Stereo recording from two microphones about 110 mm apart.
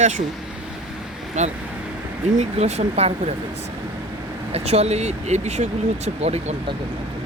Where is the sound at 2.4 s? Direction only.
80° right.